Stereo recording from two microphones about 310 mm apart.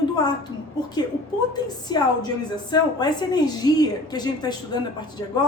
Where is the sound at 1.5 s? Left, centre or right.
Centre.